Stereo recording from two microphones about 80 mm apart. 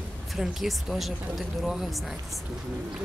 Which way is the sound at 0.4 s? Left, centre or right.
Centre.